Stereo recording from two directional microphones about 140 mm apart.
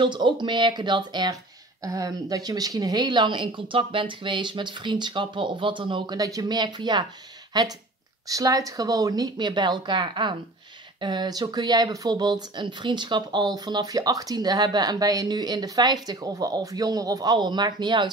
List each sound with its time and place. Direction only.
0.0 s speech: 35° right (ahead or behind)